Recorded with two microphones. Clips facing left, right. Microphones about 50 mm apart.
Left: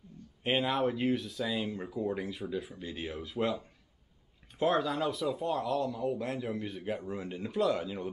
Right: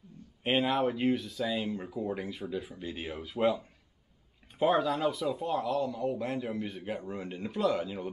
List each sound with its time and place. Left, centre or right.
0.4 s a man's voice: centre
4.6 s a man's voice: centre